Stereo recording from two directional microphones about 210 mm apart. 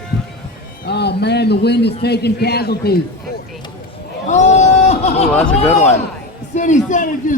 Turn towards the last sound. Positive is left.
turn(degrees=40)  # may be behind; listen again after turning